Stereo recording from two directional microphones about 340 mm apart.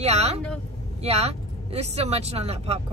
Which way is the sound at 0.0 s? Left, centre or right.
Centre.